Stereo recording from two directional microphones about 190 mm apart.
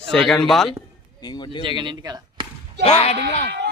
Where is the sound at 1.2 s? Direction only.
25° left (ahead or behind).